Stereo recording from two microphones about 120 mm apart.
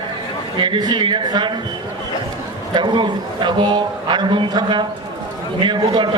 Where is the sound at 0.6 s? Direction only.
40° right (ahead or behind).